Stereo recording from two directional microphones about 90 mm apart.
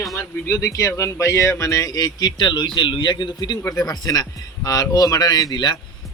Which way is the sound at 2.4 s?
60° left (ahead or behind).